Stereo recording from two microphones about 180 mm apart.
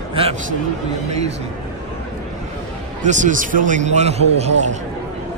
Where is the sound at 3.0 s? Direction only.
45° right (ahead or behind).